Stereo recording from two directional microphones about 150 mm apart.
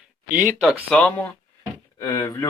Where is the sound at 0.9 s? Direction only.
10° left (ahead or behind).